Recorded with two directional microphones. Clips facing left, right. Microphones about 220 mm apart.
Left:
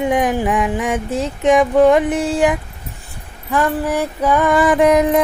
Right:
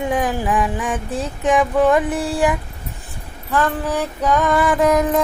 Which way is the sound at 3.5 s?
10° left (ahead or behind).